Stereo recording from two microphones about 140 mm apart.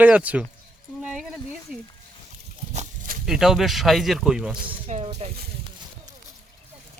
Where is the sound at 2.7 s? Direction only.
70° right (ahead or behind).